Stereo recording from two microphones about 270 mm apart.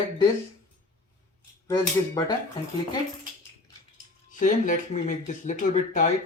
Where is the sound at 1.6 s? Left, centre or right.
Centre.